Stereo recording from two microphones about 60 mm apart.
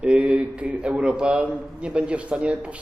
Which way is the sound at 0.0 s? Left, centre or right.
Right.